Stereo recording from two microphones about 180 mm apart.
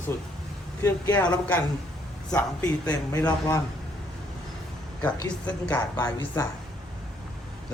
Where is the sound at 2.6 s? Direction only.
10° left (ahead or behind).